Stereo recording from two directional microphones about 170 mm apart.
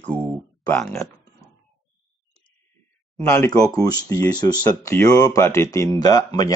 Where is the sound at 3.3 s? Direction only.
20° left (ahead or behind).